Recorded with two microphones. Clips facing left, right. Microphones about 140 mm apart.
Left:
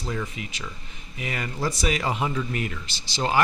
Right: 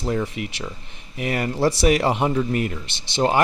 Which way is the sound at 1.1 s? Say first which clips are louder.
Right 7 dB; 55° right (ahead or behind).